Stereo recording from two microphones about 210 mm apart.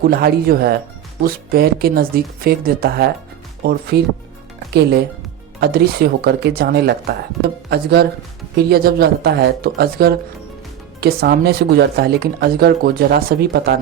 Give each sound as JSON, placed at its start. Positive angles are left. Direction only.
{"t": 0.1, "sound": "speech", "side_deg": -45}